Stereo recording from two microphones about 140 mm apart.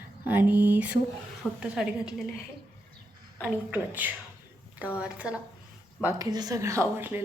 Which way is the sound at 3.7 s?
15° right (ahead or behind).